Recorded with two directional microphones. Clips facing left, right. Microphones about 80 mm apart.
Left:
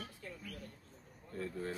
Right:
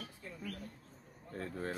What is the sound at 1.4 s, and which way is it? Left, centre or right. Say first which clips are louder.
Speech: even; right.